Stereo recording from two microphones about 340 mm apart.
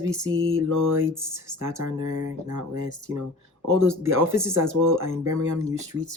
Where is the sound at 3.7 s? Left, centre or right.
Right.